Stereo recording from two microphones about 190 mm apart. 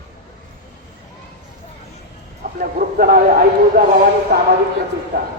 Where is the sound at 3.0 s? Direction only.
50° right (ahead or behind).